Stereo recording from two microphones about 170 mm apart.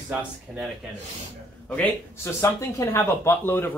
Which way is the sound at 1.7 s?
10° left (ahead or behind).